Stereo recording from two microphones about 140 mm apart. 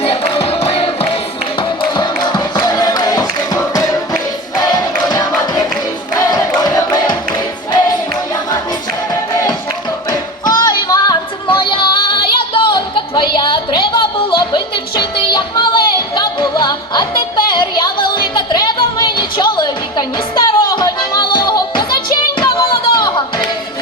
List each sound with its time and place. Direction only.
0.0 s music: 45° left (ahead or behind)
2.0 s music: 30° left (ahead or behind)
4.6 s choir: 30° left (ahead or behind)
6.1 s crowd: 25° left (ahead or behind)
10.1 s music: 30° left (ahead or behind)
22.4 s a sound: 35° left (ahead or behind)